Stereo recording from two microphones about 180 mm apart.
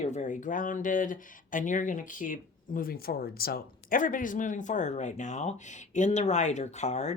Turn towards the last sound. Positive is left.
turn(degrees=40)  # may be behind; listen again after turning